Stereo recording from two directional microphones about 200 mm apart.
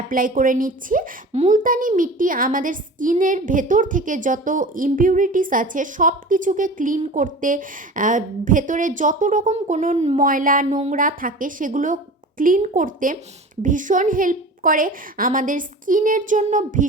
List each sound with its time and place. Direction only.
0.1 s a woman's voice: 45° right (ahead or behind)